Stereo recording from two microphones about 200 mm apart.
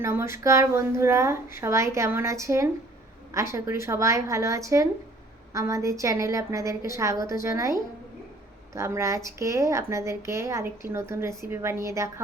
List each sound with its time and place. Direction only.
0.0 s a woman's voice: 15° right (ahead or behind)